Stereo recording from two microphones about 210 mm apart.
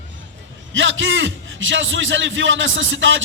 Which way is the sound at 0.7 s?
65° right (ahead or behind).